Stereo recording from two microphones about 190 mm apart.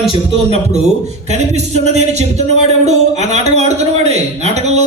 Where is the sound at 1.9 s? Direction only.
35° right (ahead or behind).